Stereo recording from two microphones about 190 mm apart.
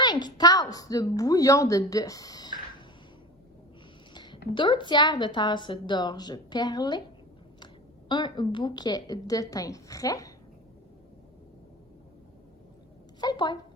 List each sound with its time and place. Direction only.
0.0 s a woman's voice: 20° left (ahead or behind)
4.1 s a sound: 25° left (ahead or behind)
4.5 s a woman's voice: 25° left (ahead or behind)
13.2 s a woman's voice: 25° left (ahead or behind)